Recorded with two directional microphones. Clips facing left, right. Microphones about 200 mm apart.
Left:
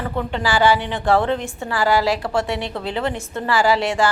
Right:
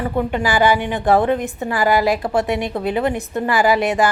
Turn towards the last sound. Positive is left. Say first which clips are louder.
# right 2 dB
turn(degrees=-20)  # may be behind; listen again after turning